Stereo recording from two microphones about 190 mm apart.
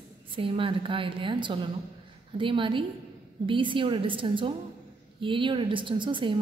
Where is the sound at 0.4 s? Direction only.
25° right (ahead or behind).